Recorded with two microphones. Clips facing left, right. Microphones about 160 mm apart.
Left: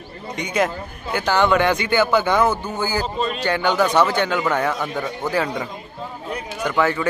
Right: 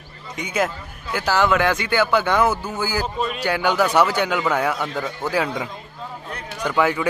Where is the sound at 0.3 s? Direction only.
5° right (ahead or behind).